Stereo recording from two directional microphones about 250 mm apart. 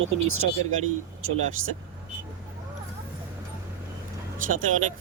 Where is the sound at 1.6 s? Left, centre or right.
Right.